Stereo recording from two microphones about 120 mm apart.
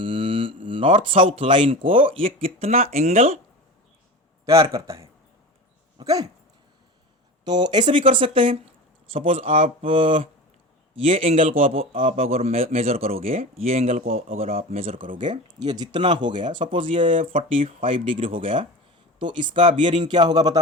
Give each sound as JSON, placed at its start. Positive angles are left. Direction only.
{"t": 0.0, "sound": "mantra", "side_deg": -50}
{"t": 0.7, "sound": "speech", "side_deg": -50}
{"t": 4.4, "sound": "a man's voice", "side_deg": -25}
{"t": 6.0, "sound": "dog", "side_deg": -30}
{"t": 7.4, "sound": "speech", "side_deg": -40}
{"t": 12.0, "sound": "speech", "side_deg": -75}
{"t": 14.2, "sound": "speech", "side_deg": -60}
{"t": 15.2, "sound": "speech", "side_deg": -35}